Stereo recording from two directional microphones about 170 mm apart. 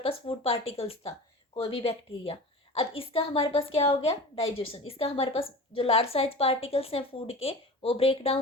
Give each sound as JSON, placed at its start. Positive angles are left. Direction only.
{"t": 0.0, "sound": "a woman's voice", "side_deg": 35}